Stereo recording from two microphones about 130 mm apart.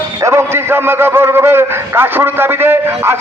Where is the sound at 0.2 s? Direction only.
20° right (ahead or behind).